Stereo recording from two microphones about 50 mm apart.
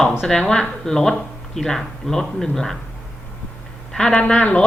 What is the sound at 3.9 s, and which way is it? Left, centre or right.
Speech, centre.